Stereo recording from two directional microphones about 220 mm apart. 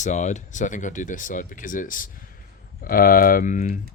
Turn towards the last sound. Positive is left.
turn(degrees=35)  # may be behind; listen again after turning